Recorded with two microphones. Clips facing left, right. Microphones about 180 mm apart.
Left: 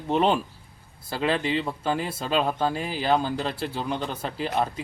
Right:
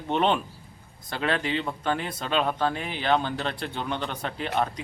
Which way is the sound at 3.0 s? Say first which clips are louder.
Left 1 dB; 5° left (ahead or behind).